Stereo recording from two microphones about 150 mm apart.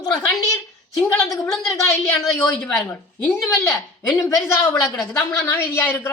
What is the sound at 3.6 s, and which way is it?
Speech, 15° left (ahead or behind).